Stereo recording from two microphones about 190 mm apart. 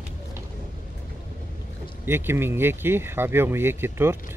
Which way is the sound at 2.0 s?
10° right (ahead or behind).